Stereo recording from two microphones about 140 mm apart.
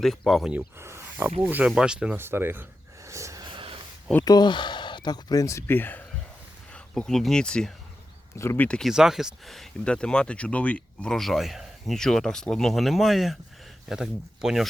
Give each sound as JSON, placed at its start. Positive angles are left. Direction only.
{"t": 0.0, "sound": "speech", "side_deg": 0}
{"t": 0.5, "sound": "speech", "side_deg": -20}
{"t": 2.1, "sound": "a sound", "side_deg": -15}
{"t": 3.5, "sound": "a sound", "side_deg": -40}
{"t": 4.3, "sound": "speech", "side_deg": 30}
{"t": 8.9, "sound": "speech", "side_deg": -5}